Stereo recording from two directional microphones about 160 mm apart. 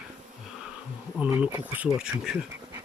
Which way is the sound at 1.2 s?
10° right (ahead or behind).